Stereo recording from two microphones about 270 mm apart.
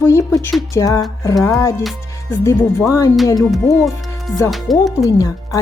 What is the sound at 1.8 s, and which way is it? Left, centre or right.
Speech, centre.